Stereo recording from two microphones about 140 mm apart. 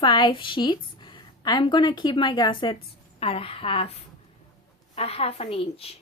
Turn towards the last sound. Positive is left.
turn(degrees=45)  # may be behind; listen again after turning